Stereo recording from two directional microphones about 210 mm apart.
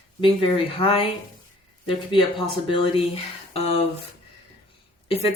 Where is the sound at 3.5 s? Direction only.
30° left (ahead or behind).